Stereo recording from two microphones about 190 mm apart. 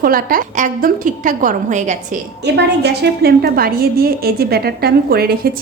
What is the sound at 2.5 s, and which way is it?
A woman's voice, 60° right (ahead or behind).